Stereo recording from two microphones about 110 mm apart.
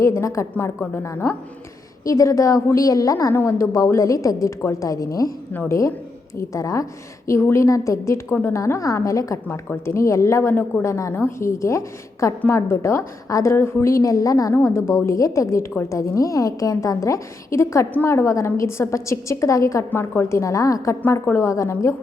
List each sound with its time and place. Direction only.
0.0 s a woman's voice: 25° left (ahead or behind)